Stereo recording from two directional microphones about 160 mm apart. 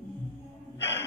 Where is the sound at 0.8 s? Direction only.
15° left (ahead or behind).